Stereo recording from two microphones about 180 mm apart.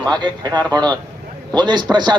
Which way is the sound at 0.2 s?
25° right (ahead or behind).